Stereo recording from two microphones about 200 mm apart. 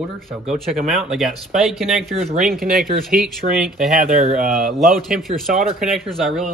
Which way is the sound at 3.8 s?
45° right (ahead or behind).